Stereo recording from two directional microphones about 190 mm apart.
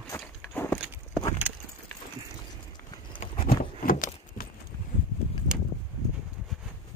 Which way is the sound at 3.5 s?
50° left (ahead or behind).